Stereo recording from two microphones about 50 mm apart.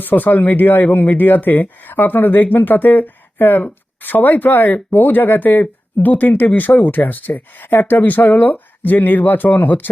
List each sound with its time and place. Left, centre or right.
0.0 s speech: left